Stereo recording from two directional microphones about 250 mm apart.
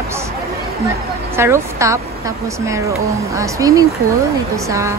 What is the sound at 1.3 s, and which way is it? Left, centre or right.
A woman's voice, centre.